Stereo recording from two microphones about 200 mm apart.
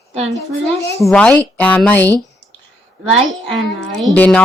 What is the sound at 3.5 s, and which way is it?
Speech, centre (ahead or behind).